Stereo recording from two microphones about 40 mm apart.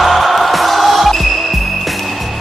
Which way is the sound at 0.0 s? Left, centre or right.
Centre.